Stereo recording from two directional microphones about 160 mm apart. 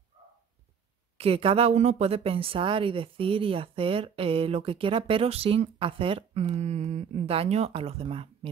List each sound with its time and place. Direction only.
1.1 s a woman's voice: 35° right (ahead or behind)